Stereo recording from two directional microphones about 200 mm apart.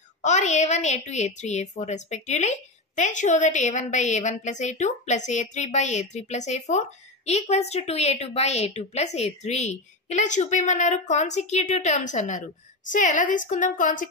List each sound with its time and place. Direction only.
0.2 s a woman's voice: 35° left (ahead or behind)